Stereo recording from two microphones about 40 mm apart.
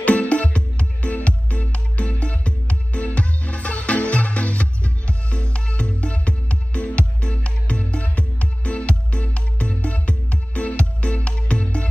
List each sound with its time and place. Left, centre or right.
0.0 s music: left